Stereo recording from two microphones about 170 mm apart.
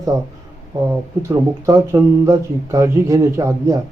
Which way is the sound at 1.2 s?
20° right (ahead or behind).